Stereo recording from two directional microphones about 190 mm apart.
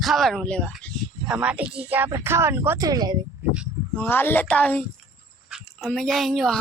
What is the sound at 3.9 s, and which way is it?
Music, 10° left (ahead or behind).